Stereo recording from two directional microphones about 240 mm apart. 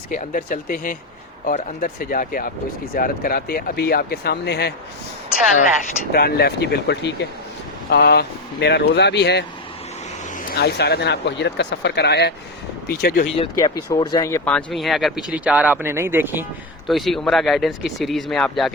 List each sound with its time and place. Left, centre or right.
0.1 s speech: left
6.1 s speech: left
13.4 s speech: left; by 18.7 s centre